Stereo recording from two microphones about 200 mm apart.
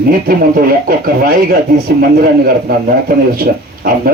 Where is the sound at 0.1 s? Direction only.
45° right (ahead or behind).